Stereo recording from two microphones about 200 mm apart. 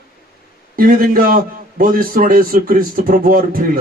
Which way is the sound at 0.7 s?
45° right (ahead or behind).